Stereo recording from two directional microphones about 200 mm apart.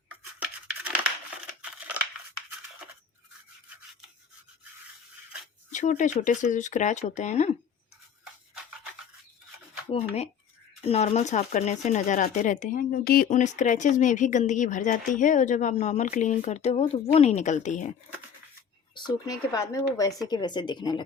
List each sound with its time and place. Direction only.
2.8 s crunch: 5° right (ahead or behind)
5.7 s speech: 40° left (ahead or behind)
10.8 s speech: 30° left (ahead or behind)
18.9 s speech: 20° left (ahead or behind)